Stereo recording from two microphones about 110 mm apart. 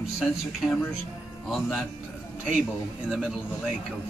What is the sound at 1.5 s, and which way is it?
Speech, centre (ahead or behind).